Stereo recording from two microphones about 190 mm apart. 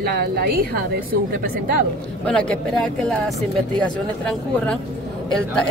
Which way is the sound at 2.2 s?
5° left (ahead or behind).